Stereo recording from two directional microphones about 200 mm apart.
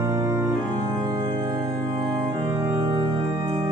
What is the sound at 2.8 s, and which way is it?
Music, 25° right (ahead or behind).